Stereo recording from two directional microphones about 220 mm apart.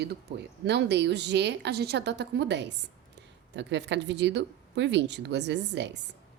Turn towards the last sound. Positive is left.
turn(degrees=-50)  # may be behind; listen again after turning